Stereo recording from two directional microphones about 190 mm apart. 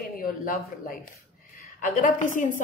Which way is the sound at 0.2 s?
50° left (ahead or behind).